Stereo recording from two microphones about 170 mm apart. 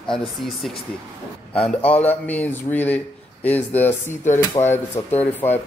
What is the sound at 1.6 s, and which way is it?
Speech, 10° left (ahead or behind).